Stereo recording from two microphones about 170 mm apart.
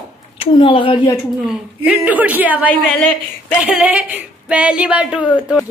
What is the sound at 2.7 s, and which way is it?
Speech, 10° left (ahead or behind).